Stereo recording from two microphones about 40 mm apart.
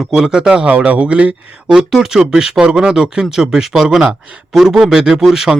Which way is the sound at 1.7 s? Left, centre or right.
Centre.